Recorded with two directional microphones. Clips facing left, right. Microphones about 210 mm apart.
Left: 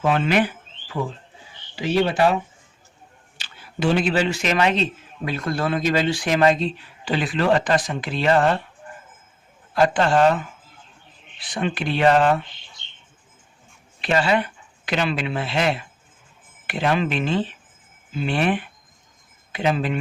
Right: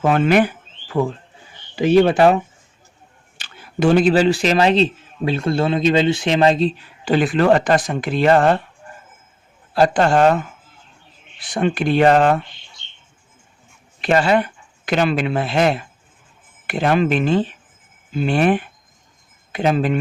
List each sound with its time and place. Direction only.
0.0 s speech: 50° right (ahead or behind)
3.3 s a man's voice: 50° right (ahead or behind); by 6.7 s 30° right (ahead or behind)
7.0 s speech: 50° right (ahead or behind)
9.7 s speech: 40° right (ahead or behind)
14.0 s speech: 50° right (ahead or behind)